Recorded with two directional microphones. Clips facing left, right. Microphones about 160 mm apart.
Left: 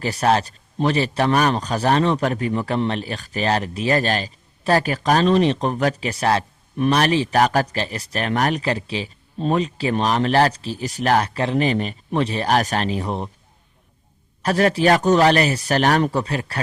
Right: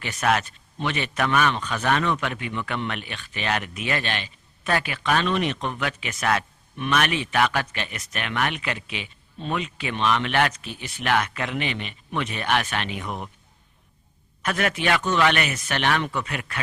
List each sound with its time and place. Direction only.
0.0 s a man's voice: 35° left (ahead or behind)
14.4 s a man's voice: 35° left (ahead or behind)